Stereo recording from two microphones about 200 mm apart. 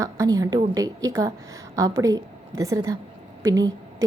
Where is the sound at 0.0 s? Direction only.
15° right (ahead or behind).